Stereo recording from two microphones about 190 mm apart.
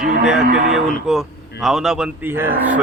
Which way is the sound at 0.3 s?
5° right (ahead or behind).